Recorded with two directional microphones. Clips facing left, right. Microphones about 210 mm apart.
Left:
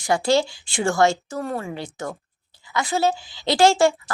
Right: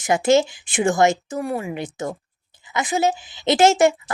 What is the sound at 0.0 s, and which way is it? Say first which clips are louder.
A woman's voice: right 3 dB; 20° right (ahead or behind).